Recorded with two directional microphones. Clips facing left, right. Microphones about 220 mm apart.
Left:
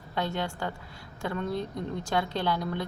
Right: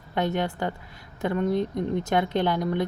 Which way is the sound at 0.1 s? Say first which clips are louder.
Right 5 dB; 20° right (ahead or behind).